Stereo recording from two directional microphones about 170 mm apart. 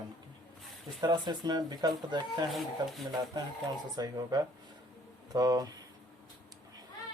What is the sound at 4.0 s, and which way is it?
Speech, 25° right (ahead or behind).